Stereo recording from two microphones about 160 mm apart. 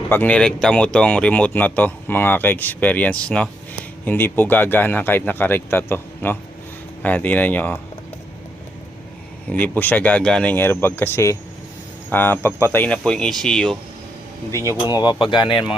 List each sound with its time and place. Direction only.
0.1 s speech: 10° left (ahead or behind)
9.5 s speech: 10° left (ahead or behind)
14.5 s speech: 20° left (ahead or behind)